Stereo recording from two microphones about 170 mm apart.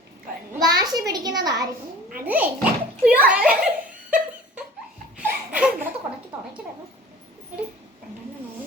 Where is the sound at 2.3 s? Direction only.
10° right (ahead or behind).